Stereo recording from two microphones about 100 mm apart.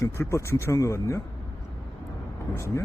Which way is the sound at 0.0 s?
30° left (ahead or behind).